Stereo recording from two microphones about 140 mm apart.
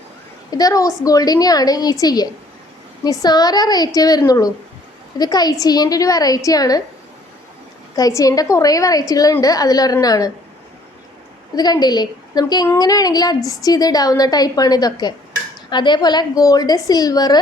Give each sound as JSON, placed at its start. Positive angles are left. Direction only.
{"t": 0.5, "sound": "a woman's voice", "side_deg": 25}
{"t": 7.9, "sound": "a woman's voice", "side_deg": 25}
{"t": 11.5, "sound": "a woman's voice", "side_deg": 30}